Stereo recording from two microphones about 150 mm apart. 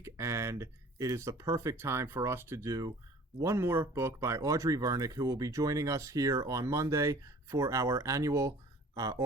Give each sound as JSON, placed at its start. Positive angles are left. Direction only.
{"t": 0.0, "sound": "speech", "side_deg": -20}